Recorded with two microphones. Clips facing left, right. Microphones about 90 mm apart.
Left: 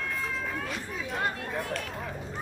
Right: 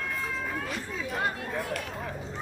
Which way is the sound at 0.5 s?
Centre (ahead or behind).